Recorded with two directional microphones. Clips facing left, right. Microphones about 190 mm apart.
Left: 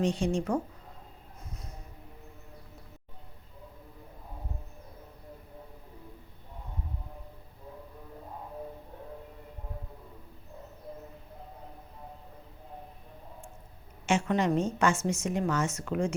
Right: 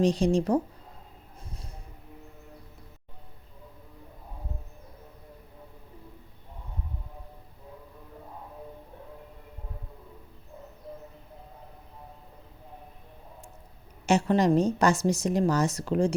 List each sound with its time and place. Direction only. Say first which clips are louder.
0.0 s a woman's voice: right 5 dB; 35° right (ahead or behind)
14.1 s a woman's voice: right 4 dB; 35° right (ahead or behind)